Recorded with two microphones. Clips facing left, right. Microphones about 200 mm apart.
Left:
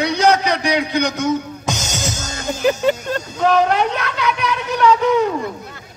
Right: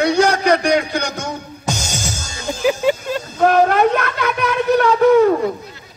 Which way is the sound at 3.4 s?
50° right (ahead or behind).